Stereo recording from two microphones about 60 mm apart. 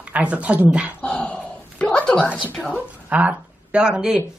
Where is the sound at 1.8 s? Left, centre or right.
Centre.